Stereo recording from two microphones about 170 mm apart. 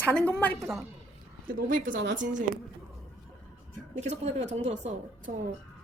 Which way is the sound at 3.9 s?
40° right (ahead or behind).